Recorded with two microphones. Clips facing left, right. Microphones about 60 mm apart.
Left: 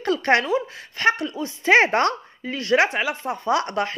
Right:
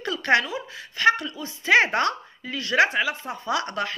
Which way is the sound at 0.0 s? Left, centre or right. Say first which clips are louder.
Left 2 dB; left.